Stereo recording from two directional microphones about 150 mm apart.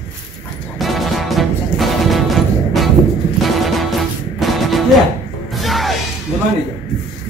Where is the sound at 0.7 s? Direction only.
Centre (ahead or behind).